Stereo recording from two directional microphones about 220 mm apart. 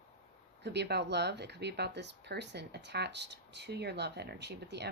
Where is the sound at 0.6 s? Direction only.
50° right (ahead or behind).